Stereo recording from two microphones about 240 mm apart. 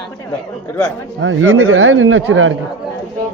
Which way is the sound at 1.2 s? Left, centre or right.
Right.